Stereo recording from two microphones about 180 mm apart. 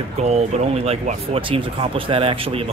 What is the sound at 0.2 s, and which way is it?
A man's voice, 35° right (ahead or behind).